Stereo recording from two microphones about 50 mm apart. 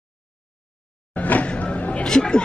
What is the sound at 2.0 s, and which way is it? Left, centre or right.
Speech, centre.